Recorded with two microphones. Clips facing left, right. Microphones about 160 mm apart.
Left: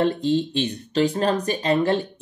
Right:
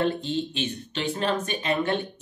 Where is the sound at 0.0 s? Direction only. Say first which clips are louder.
Left 5 dB; 35° left (ahead or behind).